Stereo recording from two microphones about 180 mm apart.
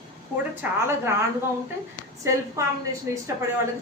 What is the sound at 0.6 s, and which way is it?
Speech, 10° right (ahead or behind).